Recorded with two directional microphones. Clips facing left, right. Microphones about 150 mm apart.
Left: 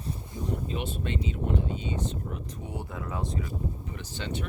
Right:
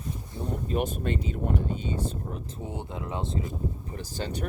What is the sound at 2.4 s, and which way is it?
Speech, 25° right (ahead or behind).